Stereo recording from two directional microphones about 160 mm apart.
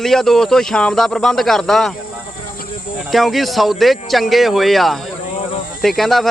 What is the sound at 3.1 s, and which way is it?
Speech, centre (ahead or behind).